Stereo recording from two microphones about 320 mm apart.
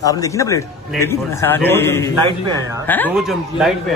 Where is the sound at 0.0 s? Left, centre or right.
Centre.